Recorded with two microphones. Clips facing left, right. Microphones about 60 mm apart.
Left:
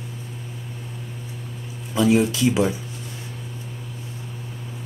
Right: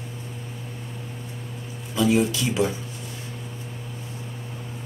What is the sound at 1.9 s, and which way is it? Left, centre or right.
Speech, centre.